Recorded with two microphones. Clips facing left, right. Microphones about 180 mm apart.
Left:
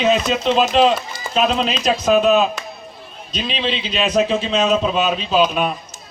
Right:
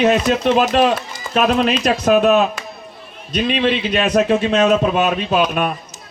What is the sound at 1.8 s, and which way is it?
A man's voice, 65° right (ahead or behind).